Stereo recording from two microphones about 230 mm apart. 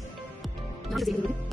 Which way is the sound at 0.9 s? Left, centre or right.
Centre.